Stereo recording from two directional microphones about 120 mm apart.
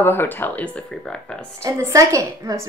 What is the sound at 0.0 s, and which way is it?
Speech, 20° left (ahead or behind).